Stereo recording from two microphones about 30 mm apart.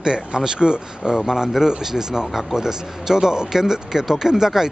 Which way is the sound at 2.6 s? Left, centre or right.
Centre.